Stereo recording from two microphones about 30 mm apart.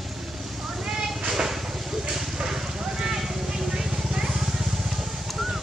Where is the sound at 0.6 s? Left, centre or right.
Centre.